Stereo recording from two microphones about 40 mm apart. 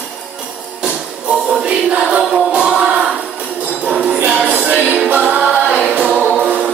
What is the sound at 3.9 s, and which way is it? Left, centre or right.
Music, right.